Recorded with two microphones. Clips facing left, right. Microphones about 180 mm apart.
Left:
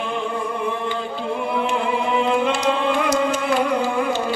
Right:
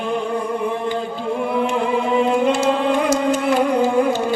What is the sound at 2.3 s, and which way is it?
Music, 45° right (ahead or behind).